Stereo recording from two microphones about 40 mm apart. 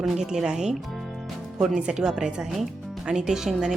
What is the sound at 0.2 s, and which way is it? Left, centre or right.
Speech, centre.